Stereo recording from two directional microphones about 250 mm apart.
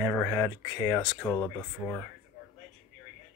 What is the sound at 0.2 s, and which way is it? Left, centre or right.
Speech, centre.